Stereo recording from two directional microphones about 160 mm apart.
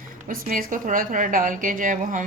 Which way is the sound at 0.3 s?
60° right (ahead or behind).